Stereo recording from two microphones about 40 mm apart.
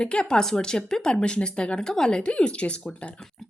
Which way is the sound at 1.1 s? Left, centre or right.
Left.